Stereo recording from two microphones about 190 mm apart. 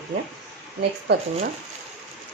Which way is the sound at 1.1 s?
60° right (ahead or behind).